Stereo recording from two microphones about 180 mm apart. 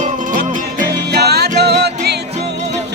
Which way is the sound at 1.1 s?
65° right (ahead or behind).